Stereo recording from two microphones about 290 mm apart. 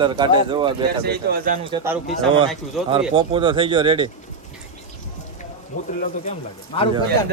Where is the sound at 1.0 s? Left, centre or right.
Right.